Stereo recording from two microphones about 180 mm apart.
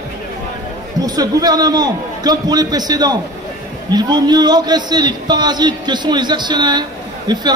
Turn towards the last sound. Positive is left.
turn(degrees=-25)  # may be behind; listen again after turning